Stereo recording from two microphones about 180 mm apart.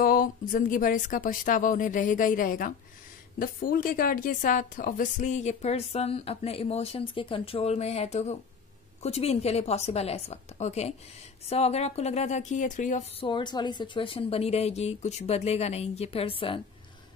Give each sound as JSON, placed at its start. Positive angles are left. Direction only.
{"t": 0.0, "sound": "a woman's voice", "side_deg": 50}
{"t": 13.2, "sound": "a woman's voice", "side_deg": 25}